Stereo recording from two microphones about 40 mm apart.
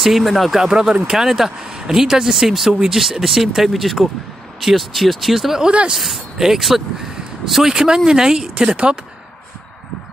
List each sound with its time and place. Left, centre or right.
0.0 s speech: centre
0.6 s speech: centre